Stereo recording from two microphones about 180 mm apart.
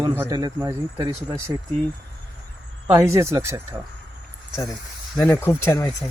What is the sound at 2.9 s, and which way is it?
Speech, 15° right (ahead or behind).